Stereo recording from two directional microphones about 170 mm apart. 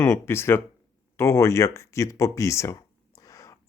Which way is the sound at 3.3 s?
20° left (ahead or behind).